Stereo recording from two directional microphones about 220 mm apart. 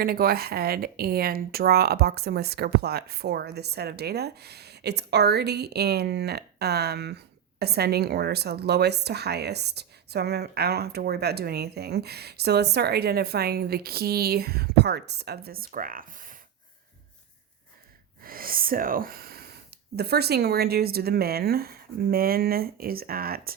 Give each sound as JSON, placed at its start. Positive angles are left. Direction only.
{"t": 0.0, "sound": "a woman's voice", "side_deg": -45}
{"t": 18.2, "sound": "a woman's voice", "side_deg": -40}